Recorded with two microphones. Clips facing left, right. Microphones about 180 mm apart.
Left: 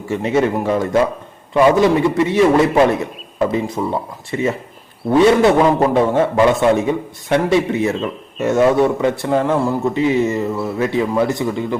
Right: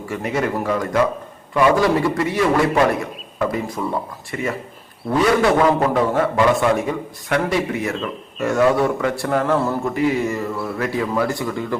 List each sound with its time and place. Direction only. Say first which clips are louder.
0.1 s speech: left 6 dB; 25° left (ahead or behind)